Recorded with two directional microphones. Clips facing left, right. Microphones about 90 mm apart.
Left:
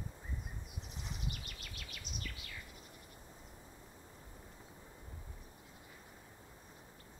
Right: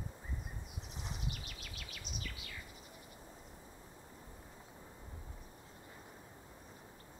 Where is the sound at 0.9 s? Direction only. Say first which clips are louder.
Right 1 dB; centre (ahead or behind).